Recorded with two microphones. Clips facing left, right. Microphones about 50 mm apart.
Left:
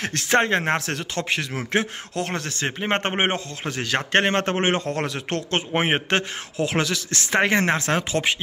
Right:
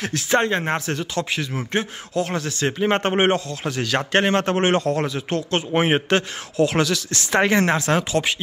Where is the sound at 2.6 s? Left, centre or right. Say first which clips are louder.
Right 4 dB; left.